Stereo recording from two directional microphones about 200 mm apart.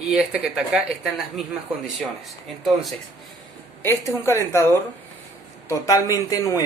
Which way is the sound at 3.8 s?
15° left (ahead or behind).